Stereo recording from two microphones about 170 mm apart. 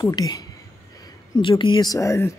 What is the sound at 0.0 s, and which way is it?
A woman's voice, 25° left (ahead or behind).